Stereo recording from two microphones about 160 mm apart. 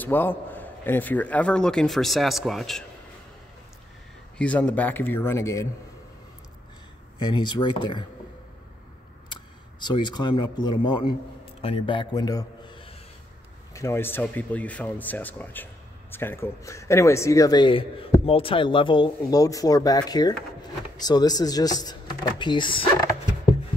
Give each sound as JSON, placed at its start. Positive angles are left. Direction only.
{"t": 0.0, "sound": "a man's voice", "side_deg": 10}
{"t": 4.4, "sound": "a man's voice", "side_deg": 10}
{"t": 7.2, "sound": "speech", "side_deg": 30}
{"t": 9.3, "sound": "a man's voice", "side_deg": 30}
{"t": 13.7, "sound": "speech", "side_deg": 15}